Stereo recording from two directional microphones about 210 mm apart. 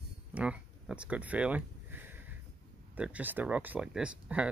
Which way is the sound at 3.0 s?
5° right (ahead or behind).